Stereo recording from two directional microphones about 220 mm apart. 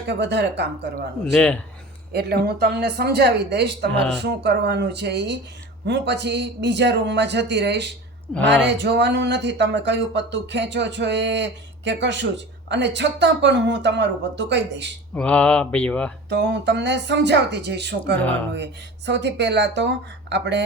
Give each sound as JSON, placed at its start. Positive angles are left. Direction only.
{"t": 0.1, "sound": "speech", "side_deg": -50}
{"t": 1.2, "sound": "speech", "side_deg": 5}
{"t": 2.1, "sound": "speech", "side_deg": -45}
{"t": 8.4, "sound": "speech", "side_deg": 5}
{"t": 8.6, "sound": "speech", "side_deg": -50}
{"t": 15.1, "sound": "speech", "side_deg": 5}
{"t": 16.3, "sound": "speech", "side_deg": -50}